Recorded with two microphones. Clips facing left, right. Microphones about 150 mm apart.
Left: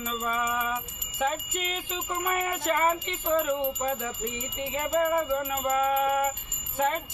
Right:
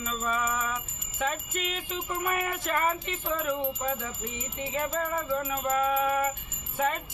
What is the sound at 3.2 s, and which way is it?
Speech, 20° left (ahead or behind).